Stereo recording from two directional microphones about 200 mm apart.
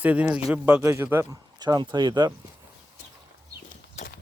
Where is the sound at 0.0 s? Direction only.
5° right (ahead or behind).